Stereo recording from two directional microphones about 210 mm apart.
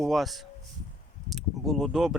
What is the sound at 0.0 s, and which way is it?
Speech, centre (ahead or behind).